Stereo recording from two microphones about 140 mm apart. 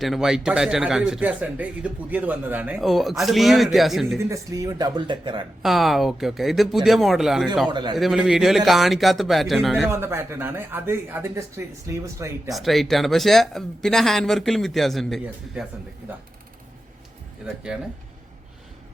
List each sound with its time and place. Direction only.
0.0 s speech: centre (ahead or behind)
2.8 s speech: centre (ahead or behind)
4.2 s speech: 25° right (ahead or behind)
5.6 s speech: centre (ahead or behind)
7.7 s a man's voice: 30° right (ahead or behind)
7.9 s speech: 5° right (ahead or behind)
9.8 s speech: 20° right (ahead or behind)
12.5 s speech: centre (ahead or behind)
17.4 s speech: 5° right (ahead or behind)